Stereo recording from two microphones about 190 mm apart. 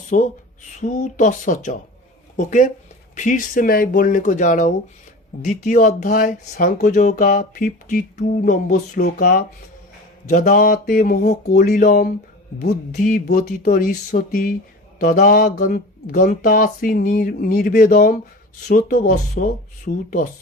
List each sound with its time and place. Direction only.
0.1 s speech: 45° left (ahead or behind)
10.2 s speech: 40° left (ahead or behind)